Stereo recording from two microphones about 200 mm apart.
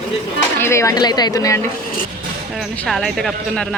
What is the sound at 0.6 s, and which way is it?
Speech, 15° left (ahead or behind).